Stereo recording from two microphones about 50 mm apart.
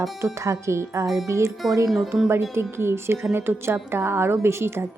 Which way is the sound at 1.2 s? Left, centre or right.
Right.